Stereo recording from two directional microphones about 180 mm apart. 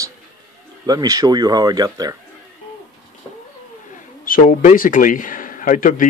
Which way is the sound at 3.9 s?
50° left (ahead or behind).